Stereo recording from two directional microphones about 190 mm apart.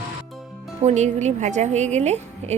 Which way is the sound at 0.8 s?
40° right (ahead or behind).